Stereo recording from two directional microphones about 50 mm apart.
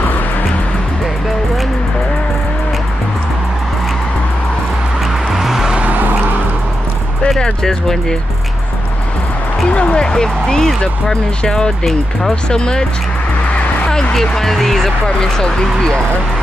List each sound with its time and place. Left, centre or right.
5.3 s vehicle: centre
5.9 s vehicle: right
7.2 s speech: centre
9.7 s a sound: left; by 10.8 s centre
10.8 s speech: centre
14.1 s speech: centre